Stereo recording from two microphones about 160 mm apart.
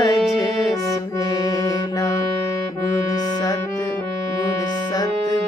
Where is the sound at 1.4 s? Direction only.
20° left (ahead or behind).